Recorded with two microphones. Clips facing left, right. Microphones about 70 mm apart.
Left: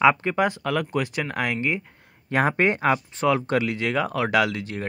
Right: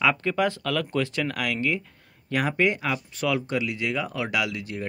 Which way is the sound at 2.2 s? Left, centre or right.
Left.